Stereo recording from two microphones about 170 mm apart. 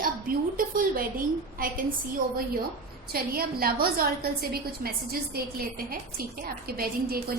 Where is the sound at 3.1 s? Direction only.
65° right (ahead or behind).